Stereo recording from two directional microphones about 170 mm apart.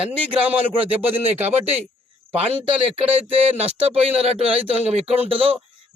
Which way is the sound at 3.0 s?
35° right (ahead or behind).